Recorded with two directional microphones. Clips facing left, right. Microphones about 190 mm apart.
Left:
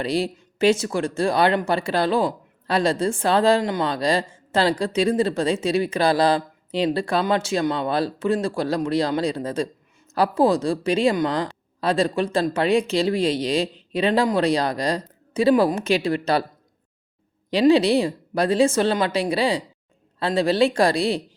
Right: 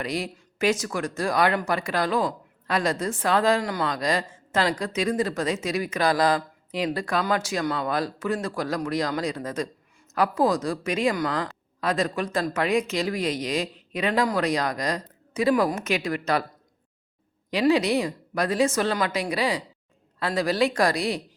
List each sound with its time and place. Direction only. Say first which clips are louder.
0.0 s speech: left 6 dB; 30° left (ahead or behind)
17.5 s speech: left 5 dB; 30° left (ahead or behind)